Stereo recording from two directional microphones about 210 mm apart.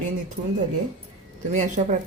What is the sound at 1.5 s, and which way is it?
Speech, 35° right (ahead or behind).